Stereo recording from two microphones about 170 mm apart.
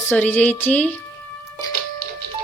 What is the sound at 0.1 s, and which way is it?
Speech, 10° left (ahead or behind).